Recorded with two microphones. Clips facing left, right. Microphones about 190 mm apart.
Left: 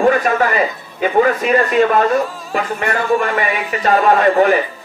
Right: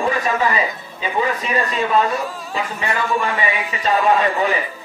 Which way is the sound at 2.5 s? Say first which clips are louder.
Left 5 dB; 55° left (ahead or behind).